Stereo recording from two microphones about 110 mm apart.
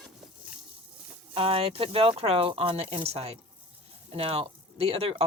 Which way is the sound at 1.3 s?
60° right (ahead or behind).